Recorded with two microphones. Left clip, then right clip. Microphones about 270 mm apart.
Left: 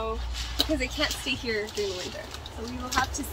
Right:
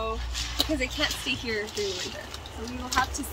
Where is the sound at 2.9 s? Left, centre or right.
Centre.